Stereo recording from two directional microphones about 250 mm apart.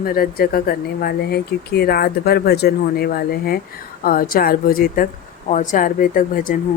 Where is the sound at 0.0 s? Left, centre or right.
Left.